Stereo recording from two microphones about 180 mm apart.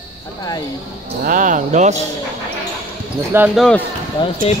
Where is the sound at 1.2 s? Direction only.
45° right (ahead or behind).